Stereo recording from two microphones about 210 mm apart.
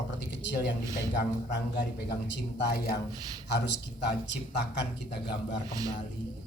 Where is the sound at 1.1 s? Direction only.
55° left (ahead or behind).